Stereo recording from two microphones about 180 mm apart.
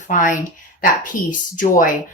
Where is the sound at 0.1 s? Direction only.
45° left (ahead or behind).